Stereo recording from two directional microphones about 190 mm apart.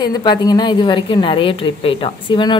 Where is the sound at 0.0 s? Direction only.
25° left (ahead or behind).